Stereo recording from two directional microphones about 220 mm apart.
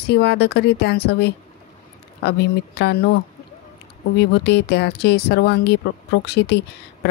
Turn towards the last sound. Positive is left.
turn(degrees=50)  # may be behind; listen again after turning